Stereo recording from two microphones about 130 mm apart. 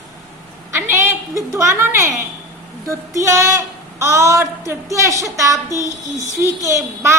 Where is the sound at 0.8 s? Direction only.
20° right (ahead or behind).